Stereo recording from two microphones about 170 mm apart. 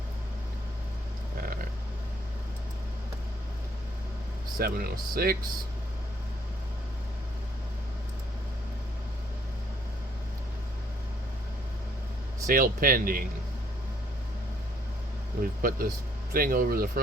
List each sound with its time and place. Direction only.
4.5 s speech: 60° right (ahead or behind)
12.5 s speech: 55° right (ahead or behind)
15.4 s speech: 55° right (ahead or behind)